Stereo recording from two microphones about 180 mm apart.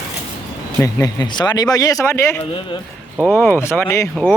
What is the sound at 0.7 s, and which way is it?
Speech, 20° left (ahead or behind).